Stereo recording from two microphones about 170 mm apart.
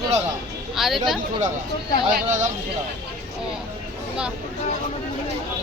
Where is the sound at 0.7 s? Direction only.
Centre (ahead or behind).